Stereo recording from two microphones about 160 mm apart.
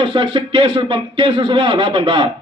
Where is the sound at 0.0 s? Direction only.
30° right (ahead or behind).